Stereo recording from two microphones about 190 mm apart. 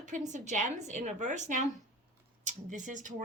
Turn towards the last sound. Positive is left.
turn(degrees=-40)  # may be behind; listen again after turning